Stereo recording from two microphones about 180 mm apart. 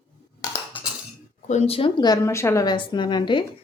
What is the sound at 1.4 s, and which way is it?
A woman's voice, 35° left (ahead or behind).